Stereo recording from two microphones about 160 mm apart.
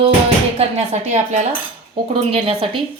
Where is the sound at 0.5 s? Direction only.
45° right (ahead or behind).